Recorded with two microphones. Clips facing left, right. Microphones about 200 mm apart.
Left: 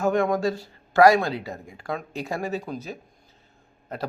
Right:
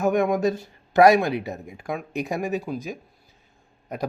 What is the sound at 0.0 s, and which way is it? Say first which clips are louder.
Speech: right 1 dB; 15° right (ahead or behind).